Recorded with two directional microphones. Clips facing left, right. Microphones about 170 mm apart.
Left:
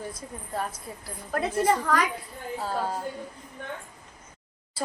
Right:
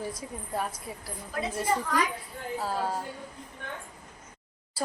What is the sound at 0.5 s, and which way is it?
Speech, 5° right (ahead or behind).